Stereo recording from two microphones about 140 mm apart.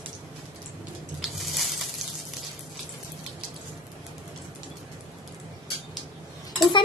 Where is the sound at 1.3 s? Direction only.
Centre (ahead or behind).